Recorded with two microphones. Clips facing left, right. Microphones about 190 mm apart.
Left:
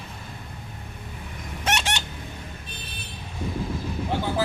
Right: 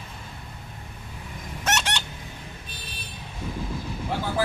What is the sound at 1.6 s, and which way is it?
Squawk, 15° left (ahead or behind).